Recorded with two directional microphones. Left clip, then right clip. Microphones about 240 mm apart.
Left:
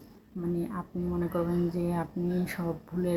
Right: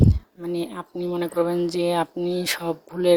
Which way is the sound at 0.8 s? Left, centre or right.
Right.